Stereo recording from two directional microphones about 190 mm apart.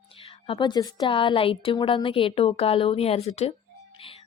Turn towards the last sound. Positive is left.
turn(degrees=35)  # may be behind; listen again after turning